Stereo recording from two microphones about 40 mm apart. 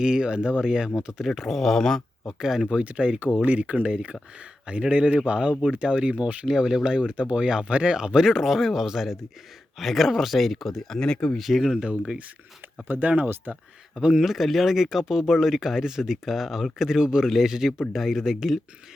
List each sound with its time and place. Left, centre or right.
0.0 s speech: right
1.4 s speech: centre
2.4 s speech: centre
2.6 s speech: right
6.5 s speech: centre
11.0 s speech: left
11.3 s speech: centre
12.9 s speech: right
14.2 s speech: centre